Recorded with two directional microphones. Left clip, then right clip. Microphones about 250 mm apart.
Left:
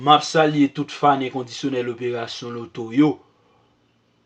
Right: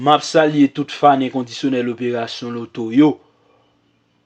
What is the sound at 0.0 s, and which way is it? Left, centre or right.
Speech, right.